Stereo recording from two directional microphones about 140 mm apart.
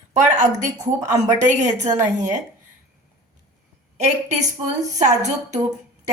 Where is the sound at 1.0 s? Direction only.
25° right (ahead or behind).